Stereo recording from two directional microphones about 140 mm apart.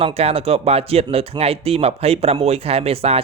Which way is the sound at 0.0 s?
45° right (ahead or behind).